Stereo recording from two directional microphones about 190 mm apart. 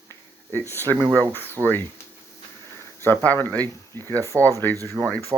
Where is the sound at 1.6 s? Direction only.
15° right (ahead or behind).